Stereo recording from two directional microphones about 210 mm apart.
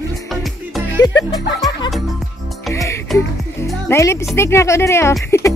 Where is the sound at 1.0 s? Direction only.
20° left (ahead or behind).